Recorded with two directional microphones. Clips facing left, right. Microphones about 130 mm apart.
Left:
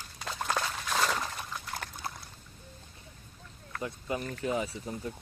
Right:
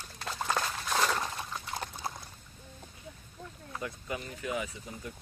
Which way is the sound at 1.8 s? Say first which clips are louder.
Right 3 dB; 20° right (ahead or behind).